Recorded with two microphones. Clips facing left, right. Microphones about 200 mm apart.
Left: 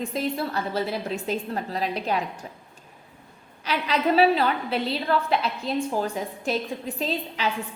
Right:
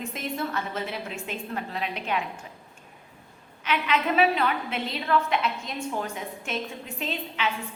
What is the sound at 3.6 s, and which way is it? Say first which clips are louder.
A woman's voice: left 2 dB; 35° left (ahead or behind).